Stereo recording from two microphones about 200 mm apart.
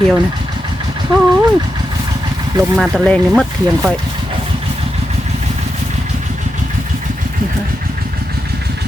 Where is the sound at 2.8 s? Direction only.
5° left (ahead or behind).